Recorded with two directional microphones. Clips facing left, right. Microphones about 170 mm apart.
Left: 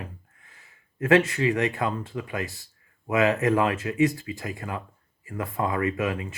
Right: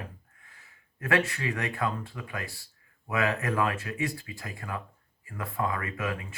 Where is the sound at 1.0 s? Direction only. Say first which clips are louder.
Left 8 dB; 20° left (ahead or behind).